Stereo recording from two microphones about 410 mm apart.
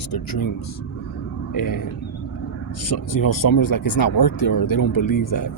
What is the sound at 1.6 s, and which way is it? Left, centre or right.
Speech, left.